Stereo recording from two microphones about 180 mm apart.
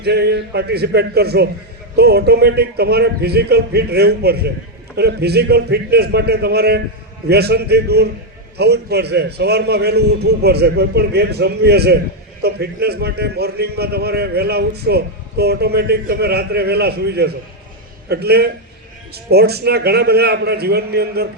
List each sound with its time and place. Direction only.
0.0 s a man's voice: 65° right (ahead or behind)